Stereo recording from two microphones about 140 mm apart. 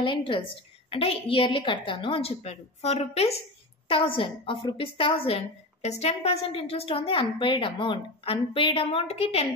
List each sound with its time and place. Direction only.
0.0 s a woman's voice: 35° left (ahead or behind)